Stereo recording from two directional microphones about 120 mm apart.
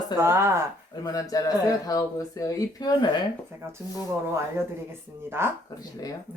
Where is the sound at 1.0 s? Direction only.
30° left (ahead or behind).